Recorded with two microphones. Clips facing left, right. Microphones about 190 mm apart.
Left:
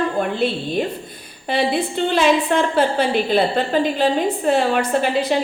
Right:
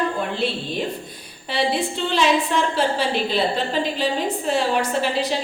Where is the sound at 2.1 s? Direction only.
55° left (ahead or behind).